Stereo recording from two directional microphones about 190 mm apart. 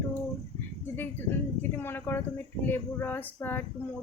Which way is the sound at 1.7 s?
10° left (ahead or behind).